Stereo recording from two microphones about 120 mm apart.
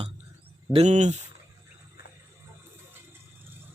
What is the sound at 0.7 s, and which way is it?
Speech, 70° right (ahead or behind).